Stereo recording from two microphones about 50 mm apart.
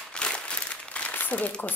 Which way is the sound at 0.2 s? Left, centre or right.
Centre.